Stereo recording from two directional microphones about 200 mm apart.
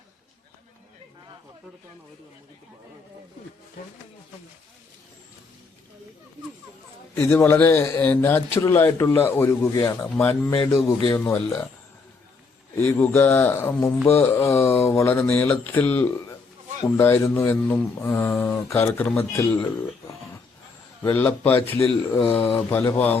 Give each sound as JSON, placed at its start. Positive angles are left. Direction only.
{"t": 7.2, "sound": "speech", "side_deg": 10}
{"t": 13.0, "sound": "speech", "side_deg": 10}
{"t": 22.1, "sound": "speech", "side_deg": 25}
{"t": 22.7, "sound": "speech", "side_deg": 10}